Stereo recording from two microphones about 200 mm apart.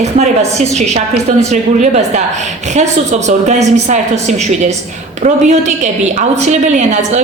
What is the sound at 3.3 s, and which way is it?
A woman's voice, 35° right (ahead or behind).